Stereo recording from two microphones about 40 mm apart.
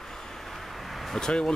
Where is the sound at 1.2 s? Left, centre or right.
Centre.